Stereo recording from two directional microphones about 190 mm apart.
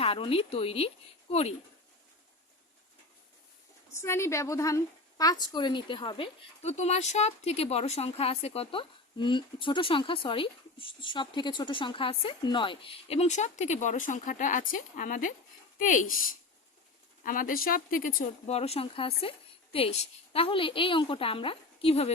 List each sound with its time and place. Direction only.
0.0 s speech: 30° left (ahead or behind)
3.9 s a woman's voice: 15° left (ahead or behind); by 18.5 s 45° left (ahead or behind)
18.5 s a woman's voice: 30° left (ahead or behind)